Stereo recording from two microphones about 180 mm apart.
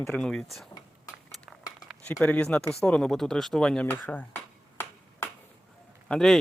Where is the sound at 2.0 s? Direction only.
10° left (ahead or behind).